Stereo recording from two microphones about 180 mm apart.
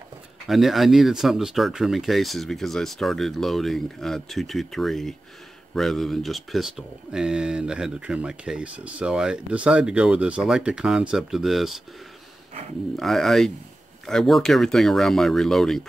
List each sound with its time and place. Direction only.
0.5 s speech: centre (ahead or behind)
12.9 s speech: centre (ahead or behind)